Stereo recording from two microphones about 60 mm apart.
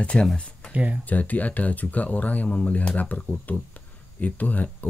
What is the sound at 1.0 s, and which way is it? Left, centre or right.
Speech, left.